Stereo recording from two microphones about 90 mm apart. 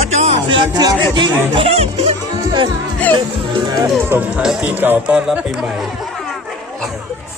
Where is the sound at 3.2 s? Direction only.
50° right (ahead or behind).